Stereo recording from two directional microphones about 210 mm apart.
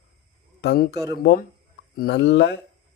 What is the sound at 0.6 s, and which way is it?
Speech, 50° left (ahead or behind).